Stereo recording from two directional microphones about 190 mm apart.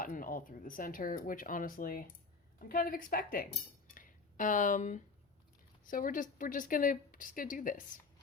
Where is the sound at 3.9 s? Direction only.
45° left (ahead or behind).